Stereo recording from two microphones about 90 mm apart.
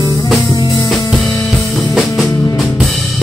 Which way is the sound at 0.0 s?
50° left (ahead or behind).